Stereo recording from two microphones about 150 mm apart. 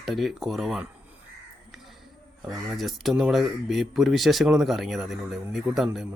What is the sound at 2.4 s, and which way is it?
Speech, centre (ahead or behind).